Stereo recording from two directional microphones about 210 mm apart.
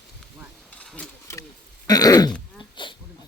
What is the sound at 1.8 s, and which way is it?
Throat clearing, 20° left (ahead or behind).